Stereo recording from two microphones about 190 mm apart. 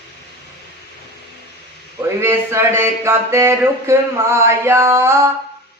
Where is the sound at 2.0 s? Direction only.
15° right (ahead or behind).